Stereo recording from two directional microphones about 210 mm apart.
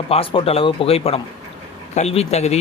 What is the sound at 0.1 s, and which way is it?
Speech, 25° left (ahead or behind).